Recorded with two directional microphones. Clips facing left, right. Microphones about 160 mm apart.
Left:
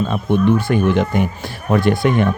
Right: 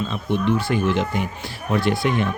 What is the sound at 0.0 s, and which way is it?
Speech, 50° left (ahead or behind).